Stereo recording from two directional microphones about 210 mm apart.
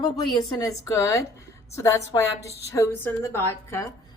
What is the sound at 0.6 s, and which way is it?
A woman's voice, 15° left (ahead or behind).